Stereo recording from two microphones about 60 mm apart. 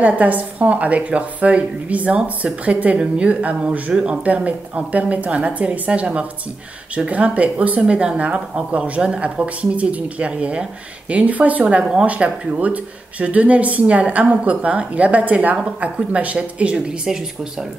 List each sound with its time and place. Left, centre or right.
0.0 s speech: right
11.6 s speech: centre